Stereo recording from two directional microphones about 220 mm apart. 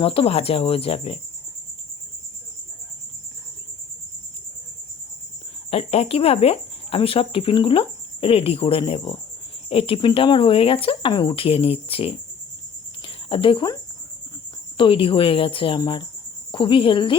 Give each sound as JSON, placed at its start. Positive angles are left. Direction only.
{"t": 0.0, "sound": "speech", "side_deg": 25}
{"t": 5.7, "sound": "speech", "side_deg": 25}
{"t": 14.8, "sound": "speech", "side_deg": 25}